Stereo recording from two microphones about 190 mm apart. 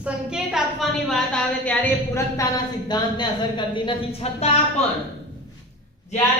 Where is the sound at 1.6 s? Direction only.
10° left (ahead or behind).